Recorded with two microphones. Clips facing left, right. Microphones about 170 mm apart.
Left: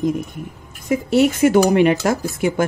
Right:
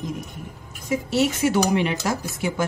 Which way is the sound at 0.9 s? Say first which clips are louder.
Left 6 dB; 55° left (ahead or behind).